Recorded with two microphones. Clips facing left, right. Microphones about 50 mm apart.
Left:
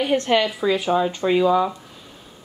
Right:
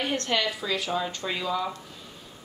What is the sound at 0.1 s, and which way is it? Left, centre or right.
A woman's voice, centre.